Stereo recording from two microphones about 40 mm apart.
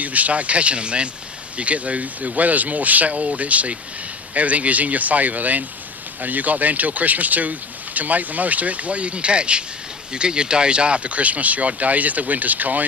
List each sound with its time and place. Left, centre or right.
0.0 s speech: right